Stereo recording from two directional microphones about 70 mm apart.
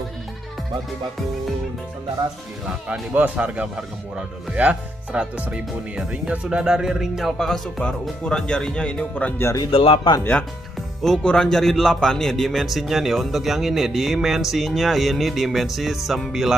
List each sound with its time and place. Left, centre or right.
2.9 s speech: centre
9.6 s speech: left
11.2 s speech: centre